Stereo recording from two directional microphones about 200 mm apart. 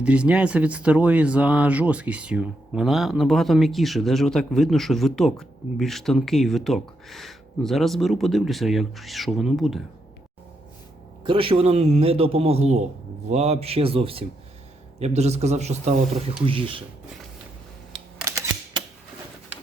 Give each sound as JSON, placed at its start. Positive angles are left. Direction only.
{"t": 0.0, "sound": "speech", "side_deg": -5}
{"t": 11.2, "sound": "a man's voice", "side_deg": -25}